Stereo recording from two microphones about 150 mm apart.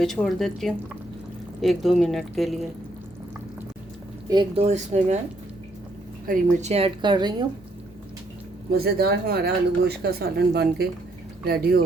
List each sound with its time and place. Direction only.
0.0 s a woman's voice: centre (ahead or behind)
4.3 s speech: 30° right (ahead or behind)
4.6 s speech: 50° right (ahead or behind)
6.2 s a woman's voice: 60° right (ahead or behind); by 7.4 s 30° right (ahead or behind)
8.7 s speech: 90° right